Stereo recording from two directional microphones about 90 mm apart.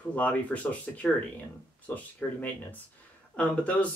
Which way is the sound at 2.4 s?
20° left (ahead or behind).